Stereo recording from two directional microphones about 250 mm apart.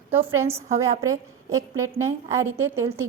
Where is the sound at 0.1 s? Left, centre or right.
Centre.